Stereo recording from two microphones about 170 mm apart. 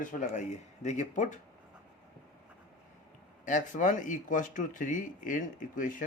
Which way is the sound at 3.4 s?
50° left (ahead or behind).